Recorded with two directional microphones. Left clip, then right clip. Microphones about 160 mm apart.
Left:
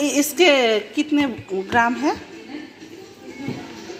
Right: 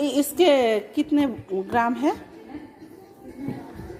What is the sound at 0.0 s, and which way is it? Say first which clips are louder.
A woman's voice: left 3 dB; 20° right (ahead or behind).